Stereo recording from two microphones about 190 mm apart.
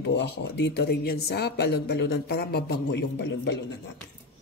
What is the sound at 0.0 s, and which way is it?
Speech, 65° left (ahead or behind).